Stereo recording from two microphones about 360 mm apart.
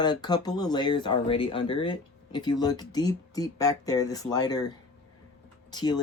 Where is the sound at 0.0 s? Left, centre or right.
Centre.